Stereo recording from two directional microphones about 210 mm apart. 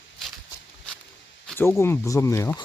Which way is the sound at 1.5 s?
10° left (ahead or behind).